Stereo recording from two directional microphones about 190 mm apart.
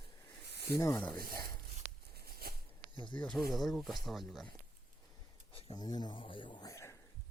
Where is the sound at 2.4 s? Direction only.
55° right (ahead or behind).